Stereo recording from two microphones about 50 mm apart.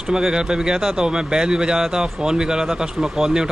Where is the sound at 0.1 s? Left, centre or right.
Centre.